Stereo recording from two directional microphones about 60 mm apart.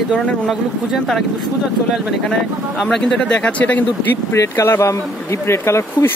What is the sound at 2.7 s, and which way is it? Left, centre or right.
Speech, centre.